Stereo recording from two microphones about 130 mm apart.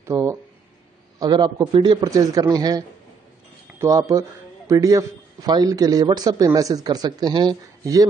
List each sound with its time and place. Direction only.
0.0 s speech: 20° right (ahead or behind)
1.2 s a man's voice: 35° right (ahead or behind)
3.8 s a man's voice: 25° right (ahead or behind)